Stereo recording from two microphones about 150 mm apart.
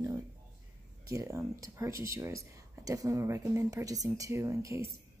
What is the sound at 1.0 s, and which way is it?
Speech, 20° right (ahead or behind).